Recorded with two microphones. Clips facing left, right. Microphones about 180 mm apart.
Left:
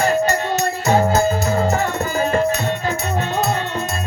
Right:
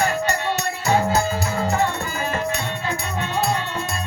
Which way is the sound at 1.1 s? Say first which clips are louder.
Left 5 dB; 45° left (ahead or behind).